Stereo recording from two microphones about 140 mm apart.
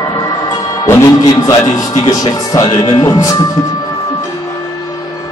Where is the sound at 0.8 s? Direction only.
25° left (ahead or behind).